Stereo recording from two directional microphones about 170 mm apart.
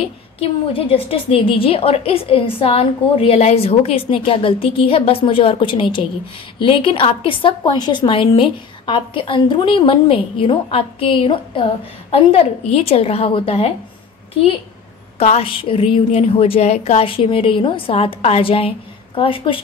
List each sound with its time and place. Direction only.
0.0 s a woman's voice: 35° left (ahead or behind)
15.1 s a woman's voice: 35° left (ahead or behind)